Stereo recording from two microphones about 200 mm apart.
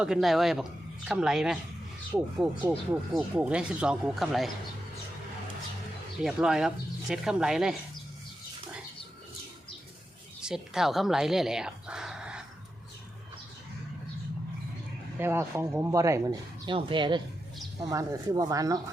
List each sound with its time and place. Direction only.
0.0 s speech: centre (ahead or behind)
2.6 s speech: 5° right (ahead or behind)
6.1 s speech: 5° right (ahead or behind)
10.4 s speech: centre (ahead or behind)
15.2 s speech: 15° right (ahead or behind)